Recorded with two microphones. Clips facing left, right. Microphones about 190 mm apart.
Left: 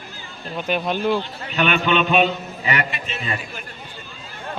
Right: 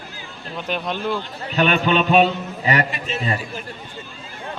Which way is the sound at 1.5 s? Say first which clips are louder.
Right 2 dB; 35° right (ahead or behind).